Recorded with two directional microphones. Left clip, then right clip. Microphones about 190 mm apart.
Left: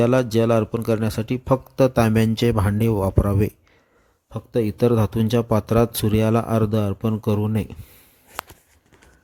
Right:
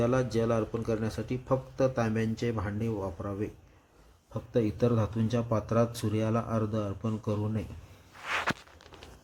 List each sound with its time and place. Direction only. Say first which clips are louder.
0.0 s a man's voice: left 10 dB; 45° left (ahead or behind)